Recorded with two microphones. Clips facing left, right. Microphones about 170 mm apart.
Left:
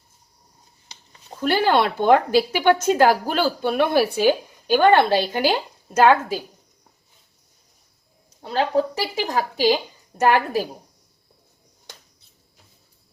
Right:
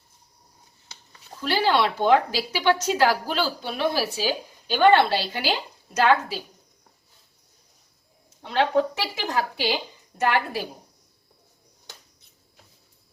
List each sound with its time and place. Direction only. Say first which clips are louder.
1.4 s a woman's voice: left 3 dB; 50° left (ahead or behind)
8.4 s a woman's voice: left 1 dB; 35° left (ahead or behind)